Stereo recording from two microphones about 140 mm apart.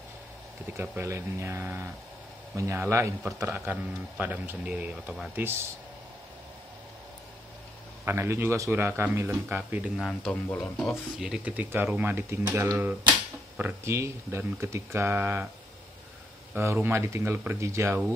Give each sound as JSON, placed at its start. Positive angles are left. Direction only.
{"t": 0.7, "sound": "speech", "side_deg": -20}
{"t": 8.0, "sound": "speech", "side_deg": -20}
{"t": 9.9, "sound": "speech", "side_deg": 5}
{"t": 16.5, "sound": "speech", "side_deg": -20}